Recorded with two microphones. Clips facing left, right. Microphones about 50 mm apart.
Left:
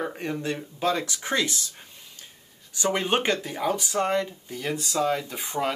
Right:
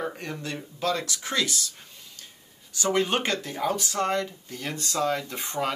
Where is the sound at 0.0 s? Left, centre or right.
Centre.